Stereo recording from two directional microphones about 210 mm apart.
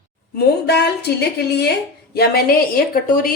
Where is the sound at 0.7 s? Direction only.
50° left (ahead or behind).